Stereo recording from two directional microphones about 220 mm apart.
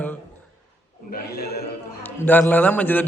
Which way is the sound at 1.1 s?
45° left (ahead or behind).